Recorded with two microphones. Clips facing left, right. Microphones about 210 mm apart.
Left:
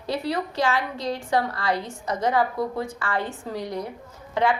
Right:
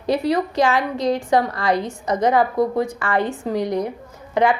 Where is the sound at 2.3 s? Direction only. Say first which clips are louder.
Right 5 dB; 45° right (ahead or behind).